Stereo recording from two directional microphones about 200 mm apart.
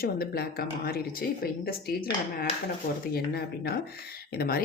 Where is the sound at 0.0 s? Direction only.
50° left (ahead or behind).